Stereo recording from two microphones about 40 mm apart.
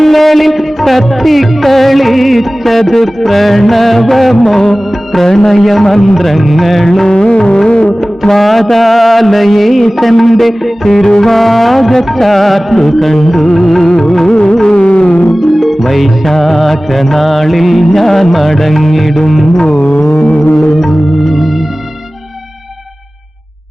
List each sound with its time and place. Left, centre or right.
0.0 s music: centre
7.1 s music: left
8.2 s music: centre
14.3 s music: left
15.6 s music: centre